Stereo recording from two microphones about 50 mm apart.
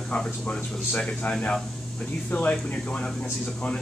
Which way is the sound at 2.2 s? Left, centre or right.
Left.